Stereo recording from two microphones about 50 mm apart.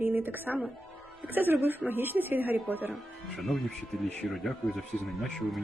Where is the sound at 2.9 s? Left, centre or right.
Centre.